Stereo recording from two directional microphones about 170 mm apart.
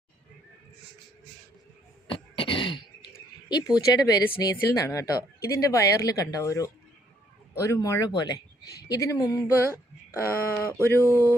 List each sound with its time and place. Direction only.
2.0 s throat clearing: 30° left (ahead or behind)
3.5 s speech: 20° left (ahead or behind)